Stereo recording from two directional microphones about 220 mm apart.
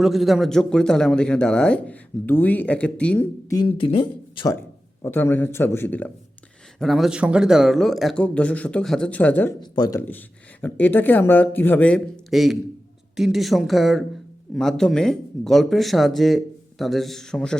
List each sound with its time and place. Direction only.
0.0 s speech: centre (ahead or behind)
3.6 s speech: 25° left (ahead or behind)
5.0 s speech: 10° left (ahead or behind)
9.6 s speech: 20° left (ahead or behind); by 17.6 s 5° left (ahead or behind)